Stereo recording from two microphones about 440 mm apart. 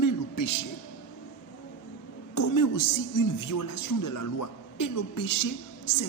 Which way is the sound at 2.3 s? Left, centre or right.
Left.